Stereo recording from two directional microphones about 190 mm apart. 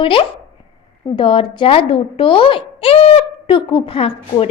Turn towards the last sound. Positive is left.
turn(degrees=30)  # may be behind; listen again after turning